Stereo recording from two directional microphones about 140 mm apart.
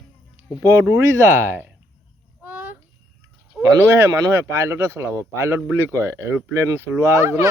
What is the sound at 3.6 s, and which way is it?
Speech, 25° right (ahead or behind).